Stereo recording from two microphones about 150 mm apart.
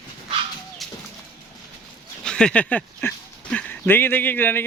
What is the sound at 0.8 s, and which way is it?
Bird, centre (ahead or behind).